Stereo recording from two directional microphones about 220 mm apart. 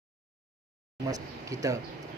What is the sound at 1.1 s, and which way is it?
Speech, 15° right (ahead or behind).